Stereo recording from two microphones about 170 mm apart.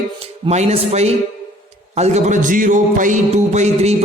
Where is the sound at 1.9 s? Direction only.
40° right (ahead or behind).